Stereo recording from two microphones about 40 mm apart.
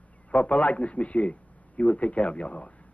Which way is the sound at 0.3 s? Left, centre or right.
Left.